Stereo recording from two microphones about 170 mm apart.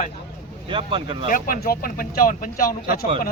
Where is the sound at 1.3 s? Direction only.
55° left (ahead or behind).